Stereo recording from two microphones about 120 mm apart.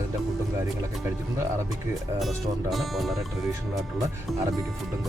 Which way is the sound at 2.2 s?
Centre (ahead or behind).